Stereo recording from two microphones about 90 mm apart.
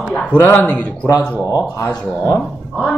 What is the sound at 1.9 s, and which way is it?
Speech, 5° left (ahead or behind).